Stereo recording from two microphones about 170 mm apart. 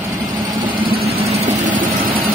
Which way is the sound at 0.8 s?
65° right (ahead or behind).